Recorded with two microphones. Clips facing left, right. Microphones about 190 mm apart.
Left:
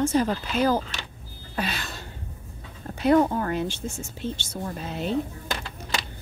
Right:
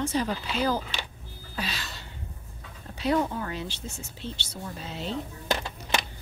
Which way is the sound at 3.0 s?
50° left (ahead or behind).